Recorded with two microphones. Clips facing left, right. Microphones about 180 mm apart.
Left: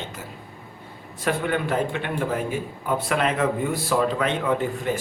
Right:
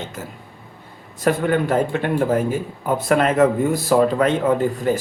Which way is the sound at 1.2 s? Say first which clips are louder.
Right 6 dB; 45° right (ahead or behind).